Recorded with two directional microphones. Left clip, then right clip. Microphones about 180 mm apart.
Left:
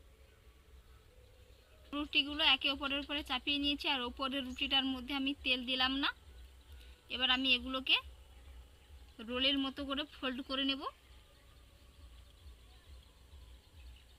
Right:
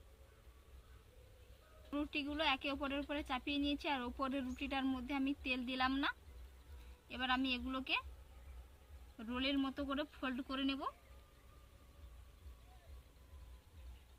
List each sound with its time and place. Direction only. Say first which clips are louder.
1.9 s speech: left 7 dB; 5° right (ahead or behind)
9.1 s speech: left 6 dB; 5° right (ahead or behind)